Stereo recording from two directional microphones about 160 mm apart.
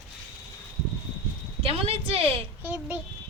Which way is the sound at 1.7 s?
35° right (ahead or behind).